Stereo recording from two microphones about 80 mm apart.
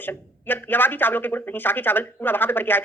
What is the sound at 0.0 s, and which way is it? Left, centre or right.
Speech, left.